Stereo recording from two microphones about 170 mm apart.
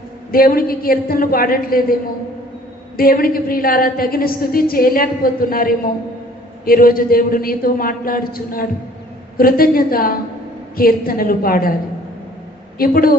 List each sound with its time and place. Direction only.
0.3 s a woman's voice: 60° left (ahead or behind)
3.0 s a woman's voice: 60° left (ahead or behind)
12.7 s a woman's voice: 60° left (ahead or behind)